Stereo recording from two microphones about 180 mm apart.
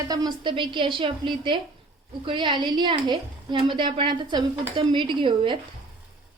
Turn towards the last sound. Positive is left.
turn(degrees=-25)  # may be behind; listen again after turning